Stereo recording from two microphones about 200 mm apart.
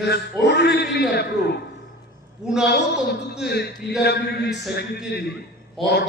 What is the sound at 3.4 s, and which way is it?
Speech, 55° left (ahead or behind).